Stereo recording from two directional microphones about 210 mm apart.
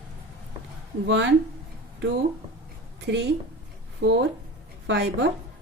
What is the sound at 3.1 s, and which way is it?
Speech, 55° right (ahead or behind).